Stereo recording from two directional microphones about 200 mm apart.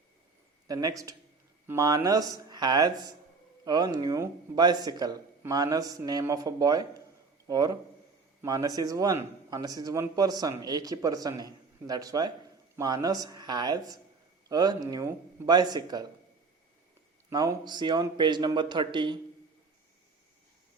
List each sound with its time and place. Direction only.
0.7 s a man's voice: 15° right (ahead or behind)
17.2 s speech: 15° right (ahead or behind)